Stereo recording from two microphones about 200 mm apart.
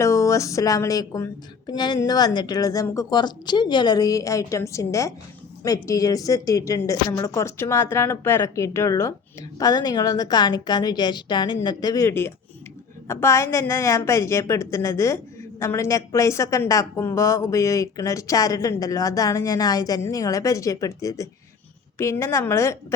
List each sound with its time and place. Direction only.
0.0 s a woman's voice: 15° left (ahead or behind)